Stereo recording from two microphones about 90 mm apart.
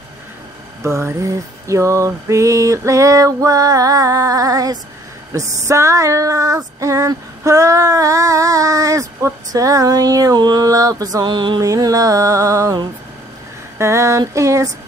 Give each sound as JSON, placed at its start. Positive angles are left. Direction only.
{"t": 0.8, "sound": "female singing", "side_deg": -35}
{"t": 11.6, "sound": "female singing", "side_deg": -40}